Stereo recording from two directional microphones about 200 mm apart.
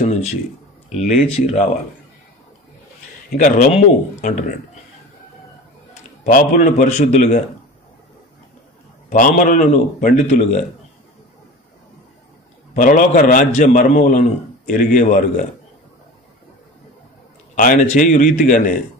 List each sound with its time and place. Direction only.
0.0 s a man's voice: 35° left (ahead or behind)
3.3 s a man's voice: 40° left (ahead or behind)
6.2 s a man's voice: 40° left (ahead or behind)
9.1 s a man's voice: 40° left (ahead or behind)
12.7 s a man's voice: 40° left (ahead or behind)
17.6 s a man's voice: 40° left (ahead or behind)